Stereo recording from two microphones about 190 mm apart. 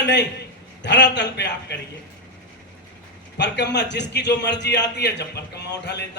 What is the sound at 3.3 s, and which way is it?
A man's voice, 65° left (ahead or behind).